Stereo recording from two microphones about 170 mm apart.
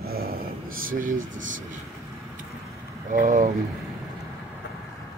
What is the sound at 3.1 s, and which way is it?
Speech, 55° right (ahead or behind).